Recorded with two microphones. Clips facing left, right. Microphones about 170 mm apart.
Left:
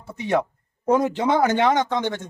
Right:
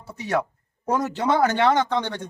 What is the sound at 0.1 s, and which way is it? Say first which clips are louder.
Speech: left 3 dB; 15° left (ahead or behind).